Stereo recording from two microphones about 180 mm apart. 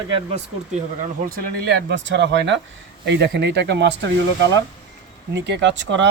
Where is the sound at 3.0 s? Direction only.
70° right (ahead or behind).